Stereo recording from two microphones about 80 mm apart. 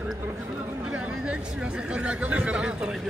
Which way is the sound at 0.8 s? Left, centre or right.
Centre.